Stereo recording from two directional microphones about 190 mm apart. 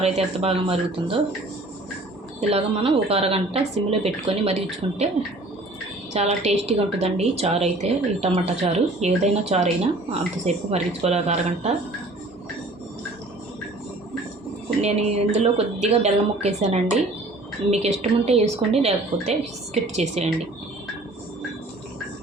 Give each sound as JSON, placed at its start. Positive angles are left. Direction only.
{"t": 0.0, "sound": "a woman's voice", "side_deg": -30}
{"t": 2.5, "sound": "a woman's voice", "side_deg": -30}
{"t": 6.1, "sound": "a woman's voice", "side_deg": -35}
{"t": 14.8, "sound": "a woman's voice", "side_deg": -35}